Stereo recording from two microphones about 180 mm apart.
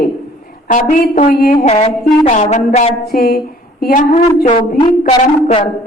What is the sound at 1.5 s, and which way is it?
Speech, 35° left (ahead or behind).